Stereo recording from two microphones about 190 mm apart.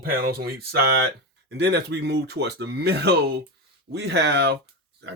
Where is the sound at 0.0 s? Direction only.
50° right (ahead or behind).